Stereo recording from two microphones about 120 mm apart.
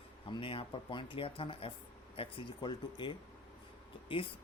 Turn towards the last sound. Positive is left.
turn(degrees=45)  # may be behind; listen again after turning